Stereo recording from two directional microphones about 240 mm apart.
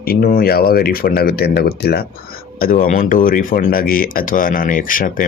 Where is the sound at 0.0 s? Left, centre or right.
Left.